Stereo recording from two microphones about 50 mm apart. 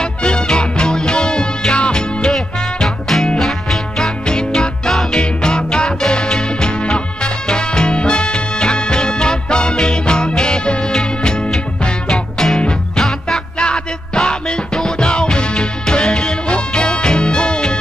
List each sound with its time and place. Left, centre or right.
0.0 s music: centre
2.3 s music: centre
4.3 s music: centre